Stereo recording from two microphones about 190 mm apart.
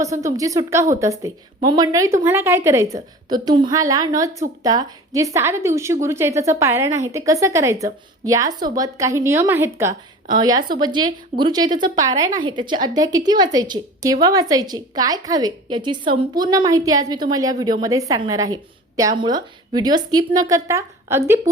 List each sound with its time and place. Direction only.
0.0 s a woman's voice: 15° right (ahead or behind)